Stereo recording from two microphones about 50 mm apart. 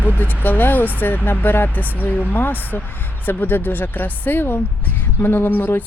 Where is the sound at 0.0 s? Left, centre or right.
Left.